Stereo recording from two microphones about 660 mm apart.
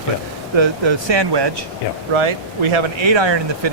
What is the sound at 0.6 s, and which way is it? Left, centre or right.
Speech, right.